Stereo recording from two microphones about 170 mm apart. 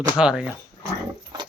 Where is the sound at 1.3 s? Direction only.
25° right (ahead or behind).